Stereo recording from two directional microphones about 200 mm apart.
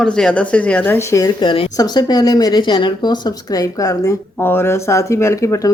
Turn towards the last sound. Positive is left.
turn(degrees=15)  # may be behind; listen again after turning